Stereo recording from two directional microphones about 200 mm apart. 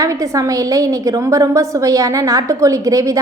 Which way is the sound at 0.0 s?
15° right (ahead or behind).